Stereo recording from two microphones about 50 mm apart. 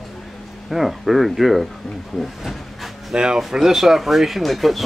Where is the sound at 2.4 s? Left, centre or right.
Centre.